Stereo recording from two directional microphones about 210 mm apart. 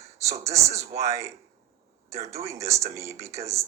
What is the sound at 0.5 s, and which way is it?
Speech, 30° right (ahead or behind).